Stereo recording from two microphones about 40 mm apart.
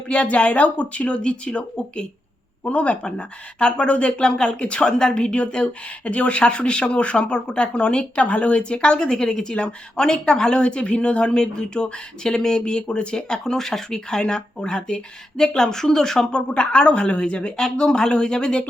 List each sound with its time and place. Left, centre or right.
0.1 s speech: left; by 16.2 s centre
16.3 s speech: left
17.6 s speech: centre